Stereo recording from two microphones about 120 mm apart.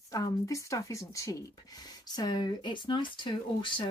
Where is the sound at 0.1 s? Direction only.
30° left (ahead or behind).